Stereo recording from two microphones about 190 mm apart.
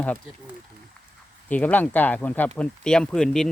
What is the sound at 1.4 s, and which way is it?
Speech, 10° left (ahead or behind).